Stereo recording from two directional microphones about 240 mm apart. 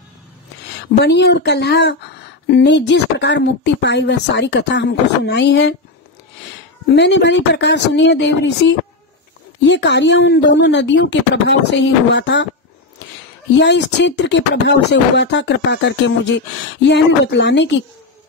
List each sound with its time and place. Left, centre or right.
0.9 s speech: left
7.0 s speech: left
13.6 s speech: left